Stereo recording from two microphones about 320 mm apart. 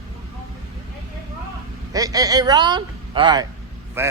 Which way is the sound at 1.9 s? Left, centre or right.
Centre.